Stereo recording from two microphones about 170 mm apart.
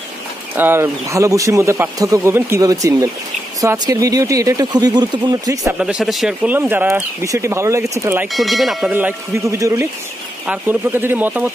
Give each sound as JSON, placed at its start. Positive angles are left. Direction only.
{"t": 0.6, "sound": "speech", "side_deg": -15}
{"t": 5.8, "sound": "speech", "side_deg": -5}
{"t": 8.3, "sound": "speech", "side_deg": 0}
{"t": 8.9, "sound": "speech", "side_deg": -15}